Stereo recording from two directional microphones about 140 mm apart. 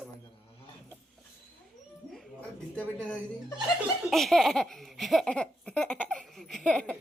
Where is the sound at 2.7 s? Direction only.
10° left (ahead or behind).